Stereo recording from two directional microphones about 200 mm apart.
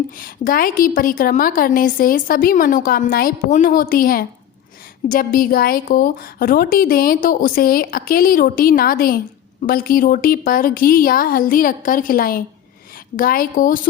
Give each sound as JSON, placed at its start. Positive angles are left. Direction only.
{"t": 0.2, "sound": "a woman's voice", "side_deg": 45}